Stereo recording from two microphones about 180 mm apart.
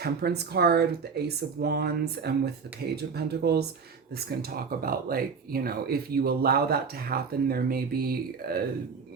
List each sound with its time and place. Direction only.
0.0 s speech: 60° right (ahead or behind)